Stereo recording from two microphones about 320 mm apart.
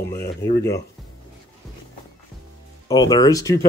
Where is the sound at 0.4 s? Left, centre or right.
Centre.